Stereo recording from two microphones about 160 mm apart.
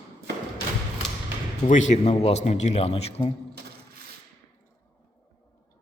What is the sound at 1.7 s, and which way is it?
A man's voice, 50° left (ahead or behind).